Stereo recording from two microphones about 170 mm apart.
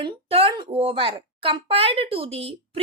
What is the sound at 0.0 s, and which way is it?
Speech, 35° right (ahead or behind).